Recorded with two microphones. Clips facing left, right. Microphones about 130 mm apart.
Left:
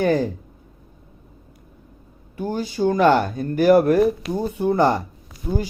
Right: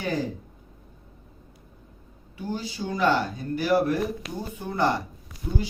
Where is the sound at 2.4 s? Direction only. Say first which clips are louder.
Left 10 dB; 50° left (ahead or behind).